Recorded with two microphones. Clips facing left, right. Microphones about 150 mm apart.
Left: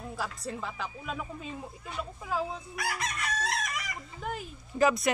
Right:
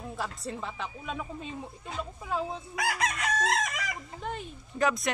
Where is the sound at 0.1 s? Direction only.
Centre (ahead or behind).